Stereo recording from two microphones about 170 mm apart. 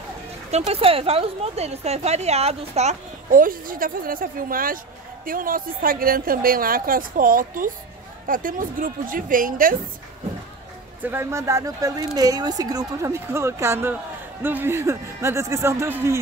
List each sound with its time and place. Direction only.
0.5 s a woman's voice: 40° right (ahead or behind); by 9.8 s 55° right (ahead or behind)
11.0 s speech: 10° right (ahead or behind)